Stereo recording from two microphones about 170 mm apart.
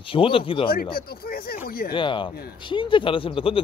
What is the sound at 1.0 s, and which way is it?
Speech, 60° left (ahead or behind).